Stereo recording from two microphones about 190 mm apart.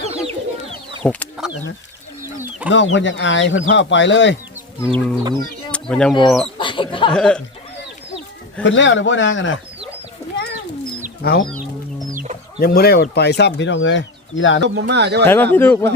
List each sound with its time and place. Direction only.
0.0 s chicken: 30° right (ahead or behind)
2.7 s speech: 75° left (ahead or behind)
4.8 s chicken: 10° left (ahead or behind)
5.7 s bird: 5° left (ahead or behind)
6.6 s bird: 25° left (ahead or behind)
7.1 s speech: 5° left (ahead or behind)
8.6 s speech: 75° left (ahead or behind)
11.2 s speech: 55° left (ahead or behind)
12.1 s chicken: 40° right (ahead or behind)
12.5 s speech: 50° left (ahead or behind); by 14.6 s 80° left
14.6 s speech: 65° right (ahead or behind)
15.2 s chicken: 10° left (ahead or behind)